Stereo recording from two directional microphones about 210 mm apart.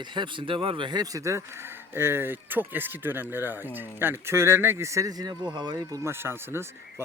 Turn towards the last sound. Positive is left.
turn(degrees=-10)  # may be behind; listen again after turning